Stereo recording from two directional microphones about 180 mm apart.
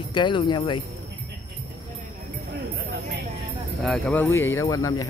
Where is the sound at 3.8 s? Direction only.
5° left (ahead or behind).